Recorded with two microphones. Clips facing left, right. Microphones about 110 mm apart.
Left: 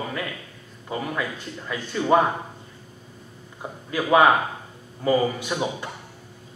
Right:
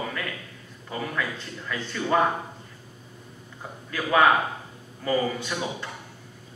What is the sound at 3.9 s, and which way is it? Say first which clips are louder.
A man's voice: left 3 dB; 20° left (ahead or behind).